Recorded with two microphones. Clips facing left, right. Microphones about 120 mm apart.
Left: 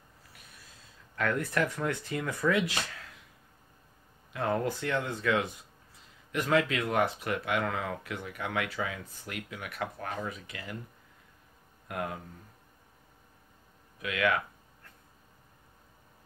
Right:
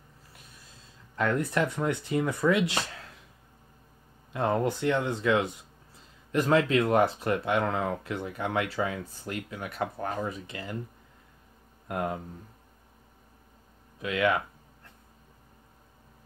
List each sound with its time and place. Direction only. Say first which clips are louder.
1.1 s speech: right 3 dB; 25° right (ahead or behind)
4.3 s speech: right 3 dB; 25° right (ahead or behind)
6.3 s speech: right 4 dB; 35° right (ahead or behind)
11.9 s speech: right 5 dB; 30° right (ahead or behind)
14.0 s speech: right 3 dB; 25° right (ahead or behind)